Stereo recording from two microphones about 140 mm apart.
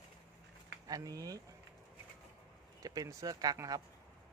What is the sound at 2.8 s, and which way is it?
Speech, 25° right (ahead or behind).